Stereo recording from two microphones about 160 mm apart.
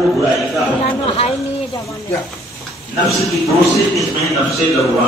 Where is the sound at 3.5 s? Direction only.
Centre (ahead or behind).